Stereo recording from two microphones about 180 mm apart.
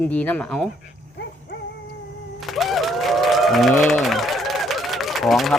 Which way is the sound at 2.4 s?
Centre (ahead or behind).